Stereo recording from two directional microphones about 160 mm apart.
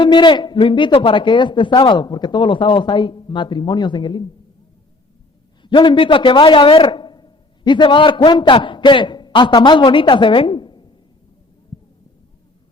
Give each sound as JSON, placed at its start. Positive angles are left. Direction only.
{"t": 0.0, "sound": "a man's voice", "side_deg": 30}
{"t": 5.6, "sound": "a man's voice", "side_deg": 30}